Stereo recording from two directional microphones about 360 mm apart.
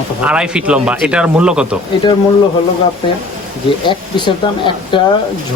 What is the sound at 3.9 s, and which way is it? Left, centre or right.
Speech, centre.